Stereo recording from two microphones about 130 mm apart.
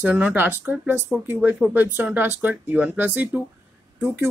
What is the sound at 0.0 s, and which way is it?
Speech, 15° right (ahead or behind).